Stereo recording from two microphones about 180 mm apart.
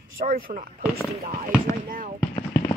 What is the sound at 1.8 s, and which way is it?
Speech, 50° right (ahead or behind).